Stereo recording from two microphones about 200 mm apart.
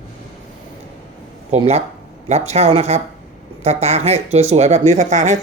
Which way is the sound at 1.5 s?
30° right (ahead or behind).